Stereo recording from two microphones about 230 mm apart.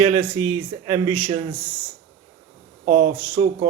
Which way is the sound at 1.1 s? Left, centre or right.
Right.